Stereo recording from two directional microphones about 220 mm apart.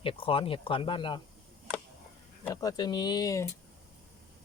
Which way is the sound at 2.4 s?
15° left (ahead or behind).